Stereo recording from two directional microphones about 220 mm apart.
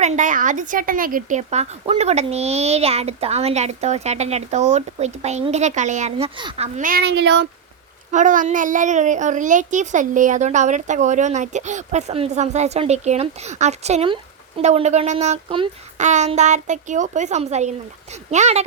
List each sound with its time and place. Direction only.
0.2 s a woman's voice: 35° right (ahead or behind); by 7.4 s 50° right (ahead or behind)
8.1 s a woman's voice: 35° right (ahead or behind)